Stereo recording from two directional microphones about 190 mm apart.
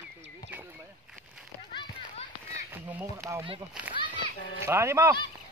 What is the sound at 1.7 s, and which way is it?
Run, 30° left (ahead or behind).